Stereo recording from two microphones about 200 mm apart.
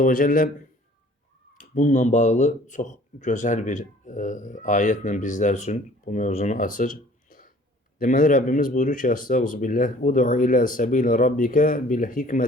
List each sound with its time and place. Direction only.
0.0 s speech: 40° left (ahead or behind)
1.5 s speech: 40° left (ahead or behind)